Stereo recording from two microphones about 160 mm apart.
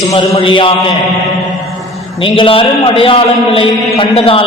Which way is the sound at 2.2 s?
35° left (ahead or behind).